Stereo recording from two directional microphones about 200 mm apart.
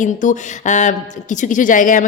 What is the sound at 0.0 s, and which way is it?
A woman's voice, 40° left (ahead or behind).